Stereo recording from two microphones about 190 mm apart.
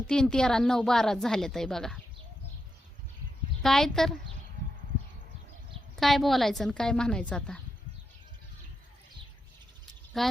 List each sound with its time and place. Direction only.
0.1 s a woman's voice: 5° left (ahead or behind)
3.6 s a woman's voice: centre (ahead or behind)
6.0 s a woman's voice: centre (ahead or behind)
10.2 s a woman's voice: centre (ahead or behind)